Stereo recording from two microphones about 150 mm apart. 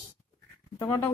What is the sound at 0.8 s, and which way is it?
Speech, 20° left (ahead or behind).